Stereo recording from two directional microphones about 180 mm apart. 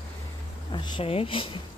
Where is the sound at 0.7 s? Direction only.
25° left (ahead or behind).